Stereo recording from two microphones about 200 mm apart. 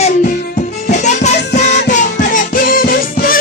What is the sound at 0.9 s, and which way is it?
Music, 35° left (ahead or behind).